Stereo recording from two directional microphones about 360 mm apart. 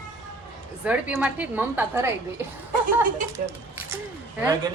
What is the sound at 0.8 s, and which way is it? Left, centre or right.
A woman's voice, centre.